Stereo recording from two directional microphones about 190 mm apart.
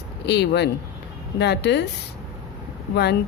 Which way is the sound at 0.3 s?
65° left (ahead or behind).